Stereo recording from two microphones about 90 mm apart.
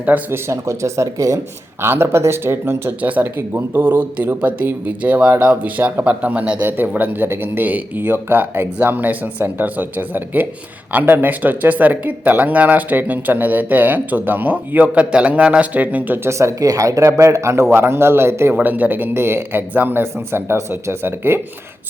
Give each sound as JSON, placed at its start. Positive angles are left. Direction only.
{"t": 0.0, "sound": "speech", "side_deg": -20}
{"t": 0.4, "sound": "a man's voice", "side_deg": -35}
{"t": 16.4, "sound": "a man's voice", "side_deg": -40}
{"t": 18.5, "sound": "speech", "side_deg": -15}